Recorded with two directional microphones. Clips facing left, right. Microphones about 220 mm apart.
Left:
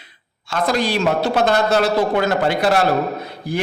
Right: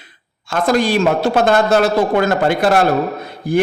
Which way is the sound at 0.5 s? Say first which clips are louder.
Right 4 dB; 50° right (ahead or behind).